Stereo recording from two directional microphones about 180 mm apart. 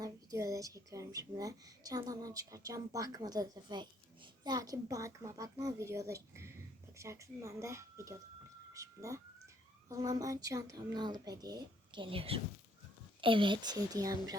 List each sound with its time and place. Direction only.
0.0 s a woman's voice: 20° right (ahead or behind)